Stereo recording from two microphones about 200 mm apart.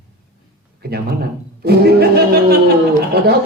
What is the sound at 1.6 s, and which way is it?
Speech, 50° right (ahead or behind).